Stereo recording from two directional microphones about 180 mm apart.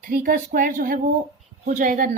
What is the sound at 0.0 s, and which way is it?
Speech, 50° right (ahead or behind).